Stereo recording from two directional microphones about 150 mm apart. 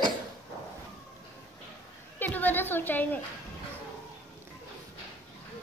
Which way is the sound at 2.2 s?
10° left (ahead or behind).